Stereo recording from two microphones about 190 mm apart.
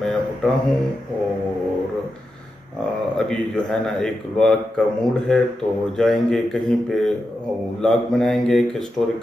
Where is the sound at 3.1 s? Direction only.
5° left (ahead or behind).